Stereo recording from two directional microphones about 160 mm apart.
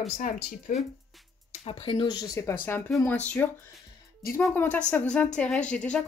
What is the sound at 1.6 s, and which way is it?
Speech, 35° left (ahead or behind).